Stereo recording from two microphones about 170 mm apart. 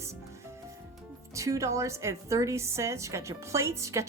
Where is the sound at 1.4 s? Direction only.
20° right (ahead or behind).